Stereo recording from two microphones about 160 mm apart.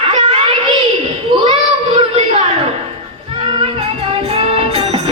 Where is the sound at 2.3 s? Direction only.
40° right (ahead or behind).